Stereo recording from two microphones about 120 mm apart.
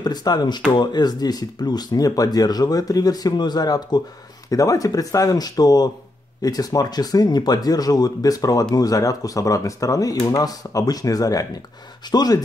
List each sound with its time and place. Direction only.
0.0 s speech: 35° left (ahead or behind)